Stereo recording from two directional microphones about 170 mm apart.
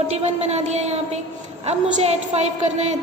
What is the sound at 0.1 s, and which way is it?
A woman's voice, 40° right (ahead or behind).